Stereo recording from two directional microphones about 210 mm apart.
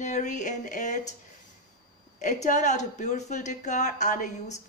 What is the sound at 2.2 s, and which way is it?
A woman's voice, 35° left (ahead or behind).